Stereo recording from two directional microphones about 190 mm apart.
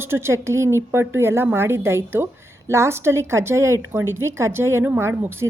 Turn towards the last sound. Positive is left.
turn(degrees=-15)  # may be behind; listen again after turning